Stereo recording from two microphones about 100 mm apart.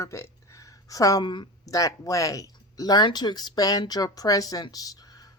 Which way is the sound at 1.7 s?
35° left (ahead or behind).